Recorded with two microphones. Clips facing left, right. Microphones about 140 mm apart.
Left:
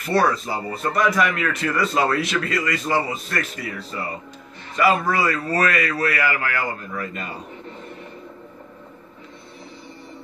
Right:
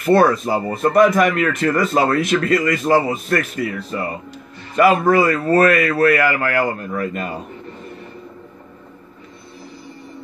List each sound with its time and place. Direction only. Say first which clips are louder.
0.0 s speech: right 6 dB; 50° right (ahead or behind)